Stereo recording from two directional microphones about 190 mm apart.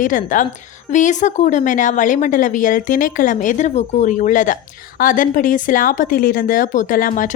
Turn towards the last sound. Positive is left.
turn(degrees=45)  # may be behind; listen again after turning